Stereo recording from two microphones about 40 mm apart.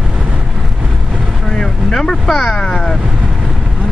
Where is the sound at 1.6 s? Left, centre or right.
Centre.